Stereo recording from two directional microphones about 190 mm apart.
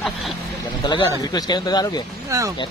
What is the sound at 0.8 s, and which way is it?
Speech, 25° left (ahead or behind).